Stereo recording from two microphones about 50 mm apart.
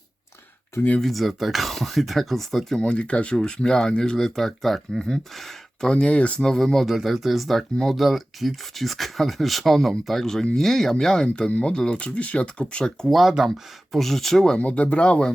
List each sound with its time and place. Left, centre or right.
1.0 s speech: centre
2.8 s speech: left
4.4 s speech: centre
5.9 s speech: left
6.4 s speech: centre
13.1 s speech: centre
14.6 s speech: left